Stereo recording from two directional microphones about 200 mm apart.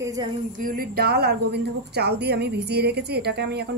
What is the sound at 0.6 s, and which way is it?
Speech, 45° right (ahead or behind).